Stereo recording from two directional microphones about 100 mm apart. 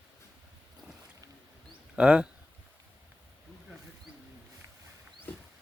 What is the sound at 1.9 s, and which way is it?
Speech, 10° right (ahead or behind).